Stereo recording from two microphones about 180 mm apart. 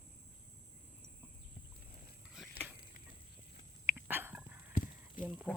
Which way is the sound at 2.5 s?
10° right (ahead or behind).